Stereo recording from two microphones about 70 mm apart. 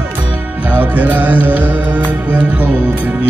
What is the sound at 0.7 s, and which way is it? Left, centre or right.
Music, right.